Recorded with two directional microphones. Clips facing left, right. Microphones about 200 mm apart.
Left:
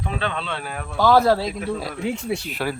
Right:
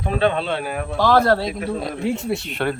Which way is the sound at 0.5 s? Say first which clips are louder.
Right 6 dB; 10° right (ahead or behind).